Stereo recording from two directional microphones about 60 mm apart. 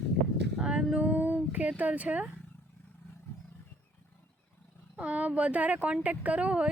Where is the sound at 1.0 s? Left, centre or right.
Right.